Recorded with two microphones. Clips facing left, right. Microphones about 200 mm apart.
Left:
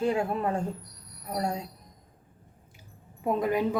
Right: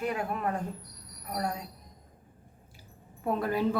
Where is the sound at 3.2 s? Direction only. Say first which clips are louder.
Left 3 dB; 15° left (ahead or behind).